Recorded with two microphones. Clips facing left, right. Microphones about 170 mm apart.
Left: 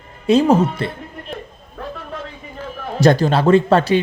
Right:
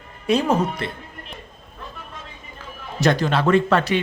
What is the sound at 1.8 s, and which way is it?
Vehicle, 65° left (ahead or behind).